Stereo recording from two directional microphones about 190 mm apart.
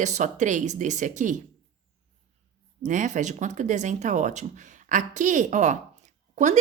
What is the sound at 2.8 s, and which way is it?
A woman's voice, 40° right (ahead or behind).